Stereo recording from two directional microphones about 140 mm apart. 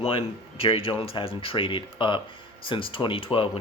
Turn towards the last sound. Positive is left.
turn(degrees=40)  # may be behind; listen again after turning